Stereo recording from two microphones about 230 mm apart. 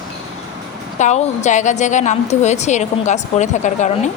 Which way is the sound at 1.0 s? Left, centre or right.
Left.